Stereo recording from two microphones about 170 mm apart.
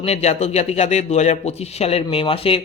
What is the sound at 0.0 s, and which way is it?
A man's voice, 40° left (ahead or behind).